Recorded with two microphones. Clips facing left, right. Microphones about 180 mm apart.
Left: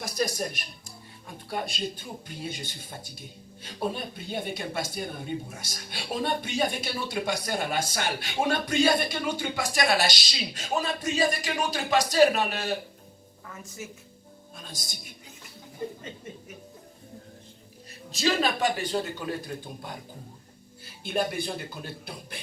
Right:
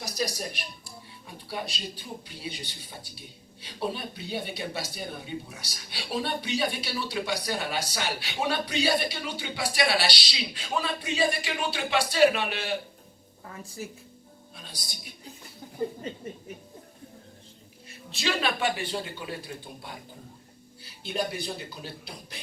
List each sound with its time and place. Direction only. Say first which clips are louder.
0.0 s speech: left 3 dB; 55° left (ahead or behind)
13.5 s a woman's voice: right 2 dB; 35° right (ahead or behind)
14.5 s music: left 3 dB; 45° left (ahead or behind)
18.1 s speech: left 3 dB; 40° left (ahead or behind)